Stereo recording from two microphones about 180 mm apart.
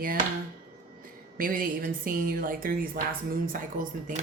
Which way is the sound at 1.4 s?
50° right (ahead or behind).